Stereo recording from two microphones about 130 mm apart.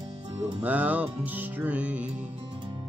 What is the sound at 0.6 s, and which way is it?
Music, 10° right (ahead or behind).